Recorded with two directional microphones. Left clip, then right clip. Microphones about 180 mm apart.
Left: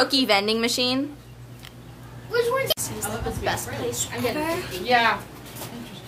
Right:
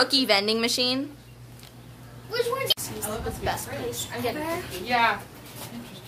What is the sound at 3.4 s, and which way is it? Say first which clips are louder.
Speech: left 4 dB; centre (ahead or behind).